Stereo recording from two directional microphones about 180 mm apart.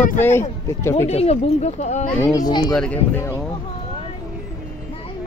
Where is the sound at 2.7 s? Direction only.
5° left (ahead or behind).